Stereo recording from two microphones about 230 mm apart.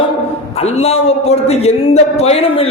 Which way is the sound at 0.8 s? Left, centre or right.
Left.